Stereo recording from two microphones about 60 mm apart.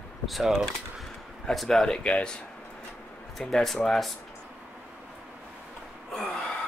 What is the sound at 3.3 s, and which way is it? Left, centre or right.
Speech, centre.